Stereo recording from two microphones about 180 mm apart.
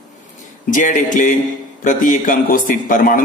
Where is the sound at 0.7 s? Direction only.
45° left (ahead or behind).